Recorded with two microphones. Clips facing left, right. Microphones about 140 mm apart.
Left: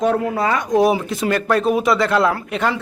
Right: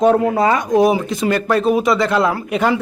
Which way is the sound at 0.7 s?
Centre (ahead or behind).